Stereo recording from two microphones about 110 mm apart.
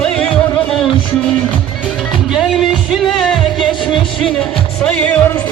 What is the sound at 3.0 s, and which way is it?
Music, centre (ahead or behind).